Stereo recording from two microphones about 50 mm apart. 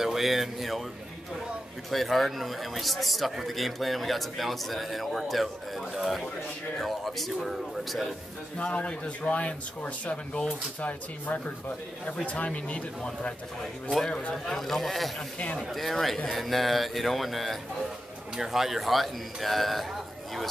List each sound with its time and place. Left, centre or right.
0.0 s speech: centre
1.9 s speech: centre
8.5 s speech: left
14.3 s speech: centre
15.1 s speech: left
15.6 s speech: centre